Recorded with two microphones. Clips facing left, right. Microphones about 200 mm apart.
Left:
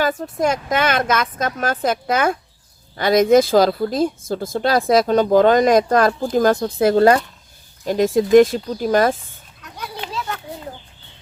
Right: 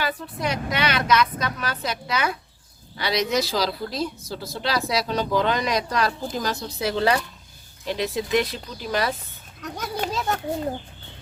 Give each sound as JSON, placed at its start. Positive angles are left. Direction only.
{"t": 0.0, "sound": "a woman's voice", "side_deg": 45}
{"t": 9.6, "sound": "children playing", "side_deg": -45}